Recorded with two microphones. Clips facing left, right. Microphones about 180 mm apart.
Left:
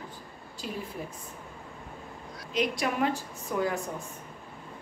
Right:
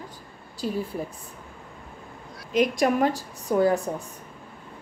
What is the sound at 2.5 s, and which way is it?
A woman's voice, 45° right (ahead or behind).